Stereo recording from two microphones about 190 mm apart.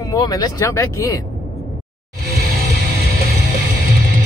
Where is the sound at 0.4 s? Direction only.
15° left (ahead or behind).